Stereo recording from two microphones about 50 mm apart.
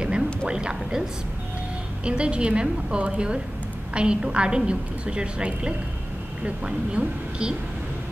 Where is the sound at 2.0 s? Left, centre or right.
Right.